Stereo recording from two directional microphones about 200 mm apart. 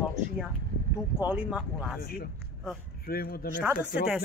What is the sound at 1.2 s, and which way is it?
Speech, 10° right (ahead or behind).